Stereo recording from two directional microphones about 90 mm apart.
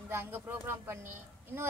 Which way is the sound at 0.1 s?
25° right (ahead or behind).